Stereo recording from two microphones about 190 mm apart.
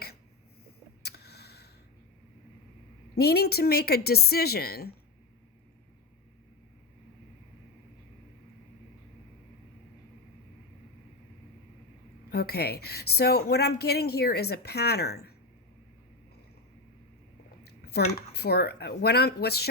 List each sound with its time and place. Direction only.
1.0 s a sound: 60° left (ahead or behind)
3.2 s a woman's voice: 55° left (ahead or behind)
12.3 s a woman's voice: 55° left (ahead or behind)
17.7 s a woman's voice: 55° left (ahead or behind)